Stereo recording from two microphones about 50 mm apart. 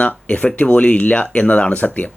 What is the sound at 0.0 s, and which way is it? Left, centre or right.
Speech, left.